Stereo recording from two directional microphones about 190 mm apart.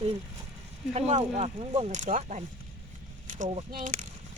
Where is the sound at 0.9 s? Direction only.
35° right (ahead or behind).